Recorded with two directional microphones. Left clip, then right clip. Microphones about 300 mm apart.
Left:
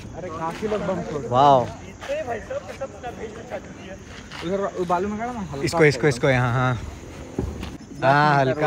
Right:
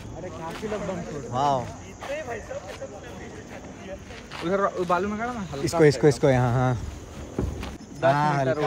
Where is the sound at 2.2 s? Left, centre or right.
Left.